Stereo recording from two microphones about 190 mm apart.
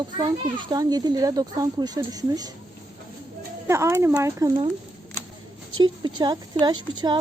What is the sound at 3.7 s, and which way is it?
Speech, 15° right (ahead or behind).